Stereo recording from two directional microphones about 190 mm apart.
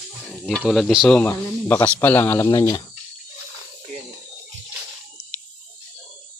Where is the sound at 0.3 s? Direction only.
5° left (ahead or behind); by 2.8 s 20° left (ahead or behind).